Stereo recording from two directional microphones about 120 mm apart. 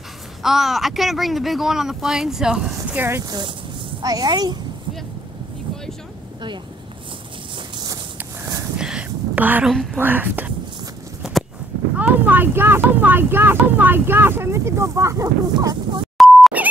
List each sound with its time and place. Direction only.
0.4 s speech: centre (ahead or behind)
3.0 s speech: 20° right (ahead or behind)
3.3 s speech: 40° right (ahead or behind)
7.5 s walk: 40° right (ahead or behind)
8.7 s a sound: 5° right (ahead or behind)
9.9 s speech: 15° right (ahead or behind)
12.0 s speech: 15° right (ahead or behind)
16.2 s beep: centre (ahead or behind)